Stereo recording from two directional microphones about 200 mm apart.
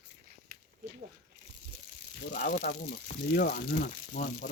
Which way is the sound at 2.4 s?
50° left (ahead or behind).